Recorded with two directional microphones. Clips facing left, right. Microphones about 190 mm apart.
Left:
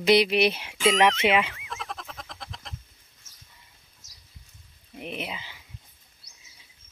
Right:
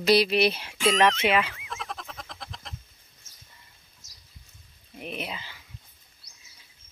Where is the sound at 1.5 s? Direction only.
Centre (ahead or behind).